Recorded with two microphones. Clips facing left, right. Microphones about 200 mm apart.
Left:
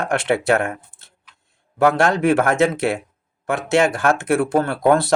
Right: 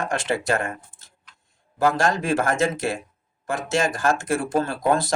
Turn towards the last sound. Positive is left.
turn(degrees=60)  # may be behind; listen again after turning